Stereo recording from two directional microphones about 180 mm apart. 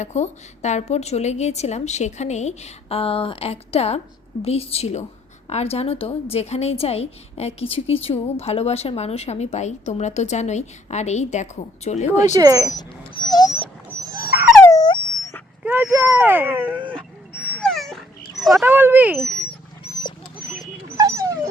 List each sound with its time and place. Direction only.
0.0 s a woman's voice: 40° left (ahead or behind)
12.4 s speech: 20° right (ahead or behind)
12.6 s speech: 25° left (ahead or behind)
14.6 s dog: 20° left (ahead or behind)
15.6 s speech: 10° right (ahead or behind)
16.9 s dog: 10° left (ahead or behind)
18.6 s speech: 10° right (ahead or behind)
19.9 s dog: 25° left (ahead or behind)
20.9 s dog: 15° right (ahead or behind)